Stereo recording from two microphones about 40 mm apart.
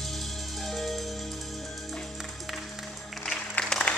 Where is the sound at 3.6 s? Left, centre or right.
Centre.